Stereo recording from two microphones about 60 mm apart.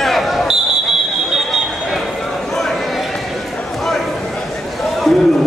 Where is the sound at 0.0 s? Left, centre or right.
Centre.